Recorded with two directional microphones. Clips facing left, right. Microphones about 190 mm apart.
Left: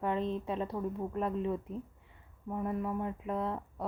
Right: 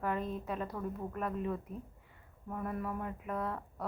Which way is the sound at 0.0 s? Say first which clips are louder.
Left 3 dB; 25° left (ahead or behind).